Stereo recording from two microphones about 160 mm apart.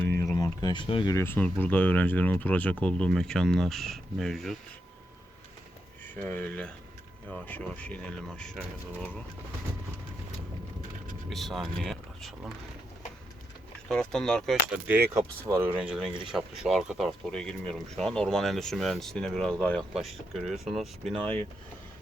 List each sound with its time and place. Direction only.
0.2 s a sound: 20° left (ahead or behind)
1.1 s speech: 15° left (ahead or behind)
6.1 s speech: 10° left (ahead or behind)
11.3 s speech: centre (ahead or behind)
13.8 s speech: 5° left (ahead or behind); by 16.0 s 15° right (ahead or behind)
16.3 s speech: 5° right (ahead or behind)